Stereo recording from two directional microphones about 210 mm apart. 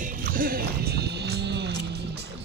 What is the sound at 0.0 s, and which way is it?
Music, 45° right (ahead or behind).